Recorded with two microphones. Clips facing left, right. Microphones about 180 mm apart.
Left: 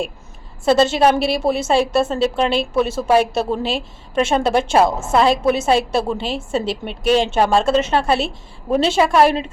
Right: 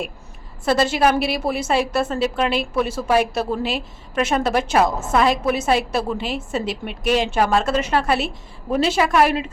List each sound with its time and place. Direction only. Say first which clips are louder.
0.6 s a woman's voice: left 4 dB; 25° left (ahead or behind)